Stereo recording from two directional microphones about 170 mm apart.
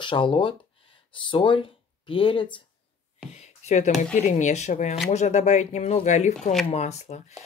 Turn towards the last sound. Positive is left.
turn(degrees=40)  # may be behind; listen again after turning